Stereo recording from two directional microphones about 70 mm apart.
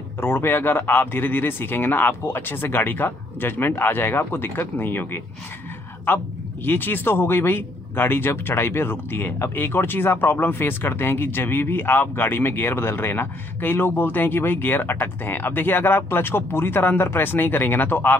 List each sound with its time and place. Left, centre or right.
0.2 s speech: left